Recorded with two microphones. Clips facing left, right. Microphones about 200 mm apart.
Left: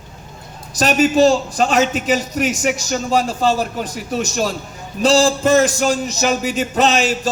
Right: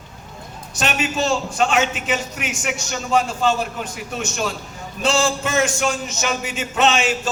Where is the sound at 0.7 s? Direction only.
40° left (ahead or behind).